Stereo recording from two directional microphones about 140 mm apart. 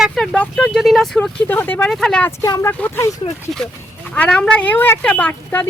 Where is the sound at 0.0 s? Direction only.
Centre (ahead or behind).